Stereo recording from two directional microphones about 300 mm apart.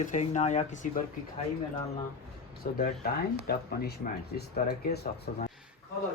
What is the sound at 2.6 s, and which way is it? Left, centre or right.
A man's voice, left.